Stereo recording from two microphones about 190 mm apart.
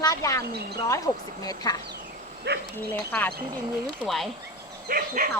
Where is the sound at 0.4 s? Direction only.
55° right (ahead or behind).